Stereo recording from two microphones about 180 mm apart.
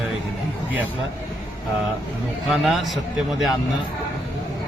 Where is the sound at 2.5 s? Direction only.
Centre (ahead or behind).